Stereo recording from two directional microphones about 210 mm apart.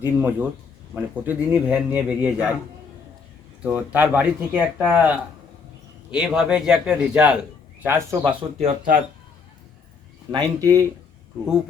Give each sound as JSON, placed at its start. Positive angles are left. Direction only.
{"t": 0.0, "sound": "speech", "side_deg": -10}
{"t": 3.6, "sound": "speech", "side_deg": -5}
{"t": 8.2, "sound": "speech", "side_deg": -25}
{"t": 10.3, "sound": "speech", "side_deg": -15}